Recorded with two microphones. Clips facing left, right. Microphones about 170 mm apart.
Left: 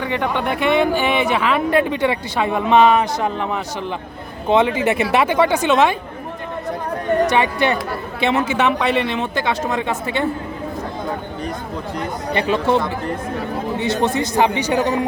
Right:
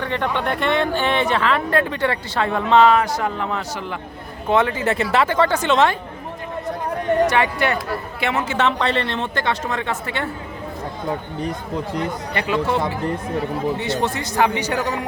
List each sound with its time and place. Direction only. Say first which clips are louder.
0.0 s speech: left 2 dB; 10° left (ahead or behind)
7.3 s speech: left 2 dB; 20° left (ahead or behind)
12.3 s speech: left 5 dB; 25° left (ahead or behind)